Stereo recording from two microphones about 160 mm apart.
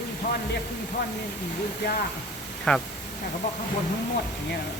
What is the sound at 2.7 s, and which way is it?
Speech, 5° left (ahead or behind).